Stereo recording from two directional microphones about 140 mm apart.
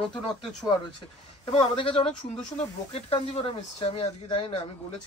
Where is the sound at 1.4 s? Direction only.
40° left (ahead or behind).